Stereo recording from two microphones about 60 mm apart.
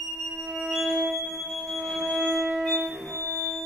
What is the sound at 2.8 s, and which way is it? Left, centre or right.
Music, right.